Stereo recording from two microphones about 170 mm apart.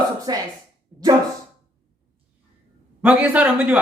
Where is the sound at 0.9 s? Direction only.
10° right (ahead or behind).